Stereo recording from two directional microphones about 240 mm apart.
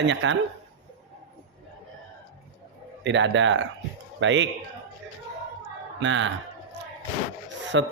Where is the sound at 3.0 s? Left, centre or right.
Right.